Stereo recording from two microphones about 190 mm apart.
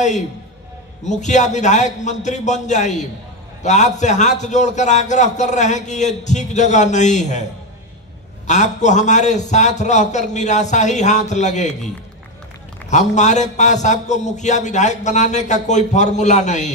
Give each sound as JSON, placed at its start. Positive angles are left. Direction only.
{"t": 1.0, "sound": "a man's voice", "side_deg": 40}
{"t": 8.5, "sound": "a man's voice", "side_deg": 40}
{"t": 12.9, "sound": "a man's voice", "side_deg": 40}